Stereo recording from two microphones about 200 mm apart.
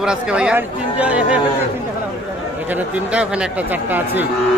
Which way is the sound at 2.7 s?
5° right (ahead or behind).